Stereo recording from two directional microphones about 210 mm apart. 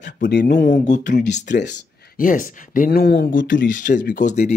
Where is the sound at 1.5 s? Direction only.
55° left (ahead or behind).